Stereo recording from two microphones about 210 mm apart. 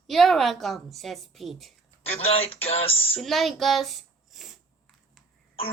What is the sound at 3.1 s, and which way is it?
A child's voice, centre (ahead or behind).